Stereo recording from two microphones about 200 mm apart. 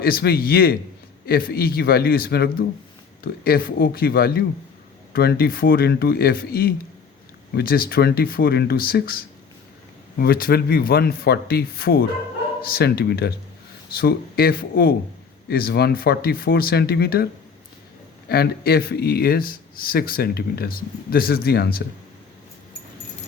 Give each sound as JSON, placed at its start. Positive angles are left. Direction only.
{"t": 0.0, "sound": "speech", "side_deg": 50}
{"t": 18.3, "sound": "speech", "side_deg": 50}